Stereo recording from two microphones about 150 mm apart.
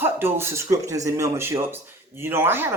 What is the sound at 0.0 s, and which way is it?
Speech, 15° right (ahead or behind).